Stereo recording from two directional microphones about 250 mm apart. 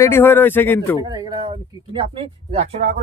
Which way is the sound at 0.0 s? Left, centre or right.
Centre.